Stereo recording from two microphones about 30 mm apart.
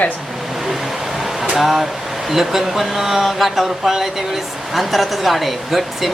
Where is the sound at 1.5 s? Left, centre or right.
Centre.